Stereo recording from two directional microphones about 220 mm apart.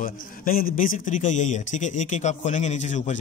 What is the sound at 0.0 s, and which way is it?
A man's voice, 40° left (ahead or behind).